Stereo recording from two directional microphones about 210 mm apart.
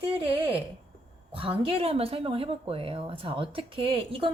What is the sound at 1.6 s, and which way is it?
Speech, 25° right (ahead or behind).